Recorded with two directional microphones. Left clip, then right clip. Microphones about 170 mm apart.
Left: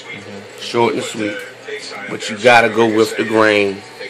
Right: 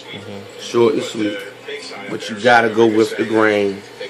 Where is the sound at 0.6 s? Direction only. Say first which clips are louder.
Even; 35° left (ahead or behind).